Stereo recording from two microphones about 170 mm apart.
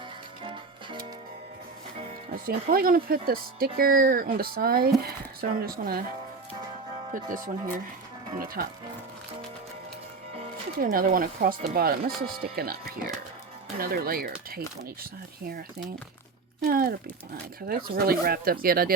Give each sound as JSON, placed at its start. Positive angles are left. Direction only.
{"t": 0.4, "sound": "music", "side_deg": -30}
{"t": 2.3, "sound": "speech", "side_deg": -60}
{"t": 7.1, "sound": "speech", "side_deg": -50}
{"t": 8.6, "sound": "speech", "side_deg": -60}
{"t": 10.8, "sound": "speech", "side_deg": -55}
{"t": 16.6, "sound": "speech", "side_deg": -60}